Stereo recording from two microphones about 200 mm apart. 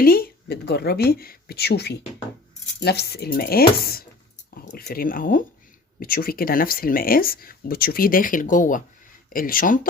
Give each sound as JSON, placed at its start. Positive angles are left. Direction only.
{"t": 0.0, "sound": "speech", "side_deg": 50}